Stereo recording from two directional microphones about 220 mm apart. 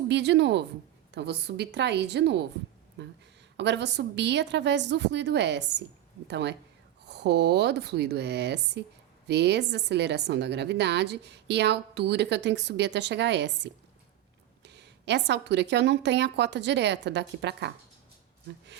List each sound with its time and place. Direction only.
0.1 s a woman's voice: 50° right (ahead or behind)